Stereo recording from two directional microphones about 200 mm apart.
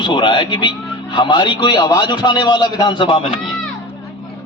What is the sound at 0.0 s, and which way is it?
A man's voice, 25° left (ahead or behind).